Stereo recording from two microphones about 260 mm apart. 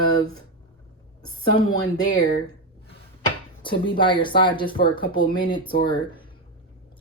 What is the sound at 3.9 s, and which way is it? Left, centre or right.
Speech, centre.